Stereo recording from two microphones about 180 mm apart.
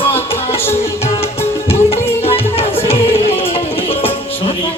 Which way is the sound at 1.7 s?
35° left (ahead or behind).